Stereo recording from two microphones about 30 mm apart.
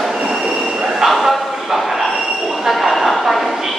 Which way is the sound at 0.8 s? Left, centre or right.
Centre.